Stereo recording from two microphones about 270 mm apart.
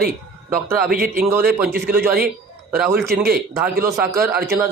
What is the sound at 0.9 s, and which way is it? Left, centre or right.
Speech, right.